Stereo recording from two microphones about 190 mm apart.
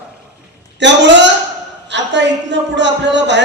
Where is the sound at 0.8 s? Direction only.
70° right (ahead or behind).